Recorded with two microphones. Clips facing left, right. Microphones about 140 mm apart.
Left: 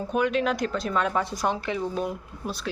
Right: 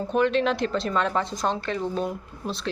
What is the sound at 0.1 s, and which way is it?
Speech, 5° left (ahead or behind).